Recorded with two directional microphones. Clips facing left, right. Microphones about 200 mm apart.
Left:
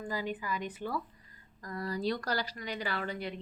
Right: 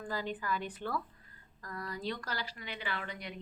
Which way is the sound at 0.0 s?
10° left (ahead or behind).